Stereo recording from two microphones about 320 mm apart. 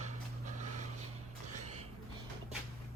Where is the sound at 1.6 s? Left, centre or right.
Right.